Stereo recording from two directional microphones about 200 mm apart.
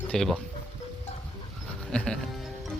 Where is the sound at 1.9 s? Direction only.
5° left (ahead or behind).